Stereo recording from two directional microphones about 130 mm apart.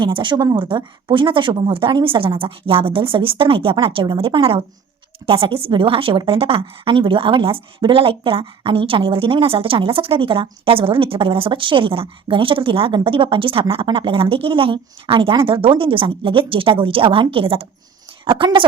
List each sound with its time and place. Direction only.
0.0 s a woman's voice: 40° right (ahead or behind)